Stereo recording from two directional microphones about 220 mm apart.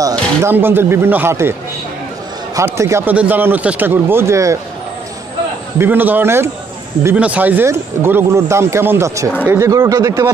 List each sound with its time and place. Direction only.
0.4 s speech: 10° right (ahead or behind)
2.5 s speech: 15° right (ahead or behind)
5.8 s speech: 10° right (ahead or behind)